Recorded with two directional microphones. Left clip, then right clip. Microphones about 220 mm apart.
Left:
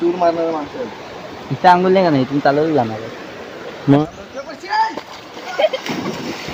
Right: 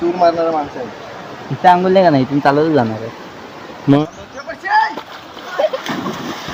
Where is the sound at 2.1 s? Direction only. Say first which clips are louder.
Right 2 dB; 45° right (ahead or behind).